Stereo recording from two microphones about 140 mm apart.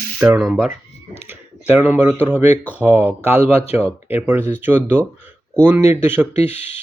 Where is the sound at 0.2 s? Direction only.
10° right (ahead or behind).